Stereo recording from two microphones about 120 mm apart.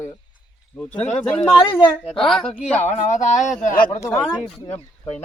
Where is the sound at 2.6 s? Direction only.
65° left (ahead or behind); by 3.7 s 90° left.